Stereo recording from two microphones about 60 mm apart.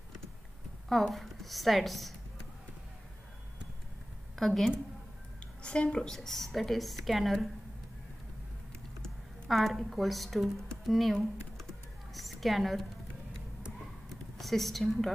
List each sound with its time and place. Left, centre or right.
0.8 s a woman's voice: centre
4.4 s a woman's voice: centre
5.6 s a woman's voice: centre
9.0 s speech: centre
11.1 s computer keyboard: centre
14.0 s a sound: centre